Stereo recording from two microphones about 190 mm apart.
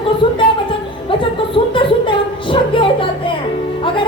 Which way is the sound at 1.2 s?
25° left (ahead or behind).